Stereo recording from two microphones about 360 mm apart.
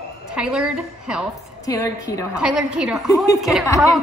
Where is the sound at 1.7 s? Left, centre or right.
Centre.